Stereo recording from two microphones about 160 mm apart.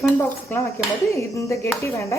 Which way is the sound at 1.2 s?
15° left (ahead or behind).